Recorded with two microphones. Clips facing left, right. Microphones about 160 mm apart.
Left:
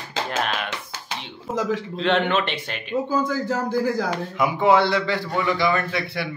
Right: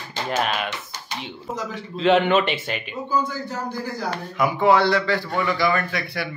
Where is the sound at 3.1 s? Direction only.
90° left.